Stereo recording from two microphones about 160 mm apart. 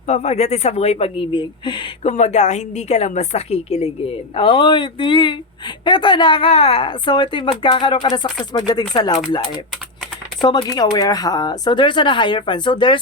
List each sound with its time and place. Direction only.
0.1 s a woman's voice: 45° left (ahead or behind)
2.0 s a woman's voice: 45° left (ahead or behind); by 9.1 s 25° left (ahead or behind)
10.4 s speech: 30° left (ahead or behind)